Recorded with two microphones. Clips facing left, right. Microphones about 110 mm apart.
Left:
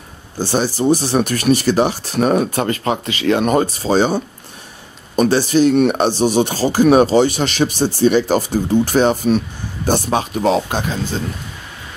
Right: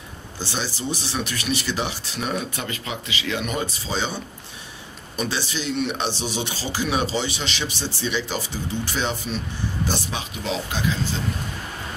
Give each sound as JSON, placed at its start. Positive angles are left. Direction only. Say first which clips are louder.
{"t": 0.4, "sound": "speech", "louder": "left 12 dB", "side_deg": 45}